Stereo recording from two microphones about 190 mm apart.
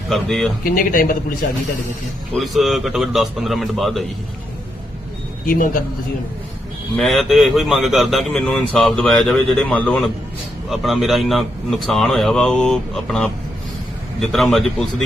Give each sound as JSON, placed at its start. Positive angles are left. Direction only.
{"t": 0.1, "sound": "speech", "side_deg": 0}
{"t": 0.6, "sound": "speech", "side_deg": 45}
{"t": 2.3, "sound": "speech", "side_deg": 0}
{"t": 5.5, "sound": "speech", "side_deg": 45}
{"t": 6.9, "sound": "speech", "side_deg": 0}